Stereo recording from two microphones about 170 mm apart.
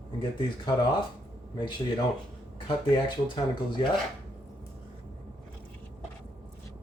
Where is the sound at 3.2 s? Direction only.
30° left (ahead or behind).